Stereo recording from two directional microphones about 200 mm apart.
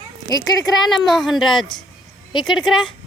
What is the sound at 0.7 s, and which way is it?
Speech, centre (ahead or behind).